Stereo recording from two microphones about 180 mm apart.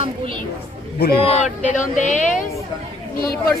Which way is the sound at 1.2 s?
40° left (ahead or behind).